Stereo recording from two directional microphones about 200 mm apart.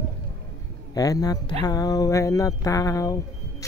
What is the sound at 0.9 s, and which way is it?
Speech, 20° left (ahead or behind).